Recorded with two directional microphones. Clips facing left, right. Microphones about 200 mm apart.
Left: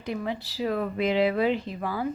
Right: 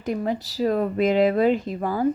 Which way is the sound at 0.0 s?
45° right (ahead or behind).